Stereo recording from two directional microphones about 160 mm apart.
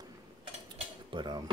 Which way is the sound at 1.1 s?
30° right (ahead or behind).